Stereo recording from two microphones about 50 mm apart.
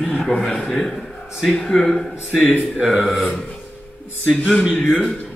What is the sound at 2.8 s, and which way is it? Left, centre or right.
Speech, centre.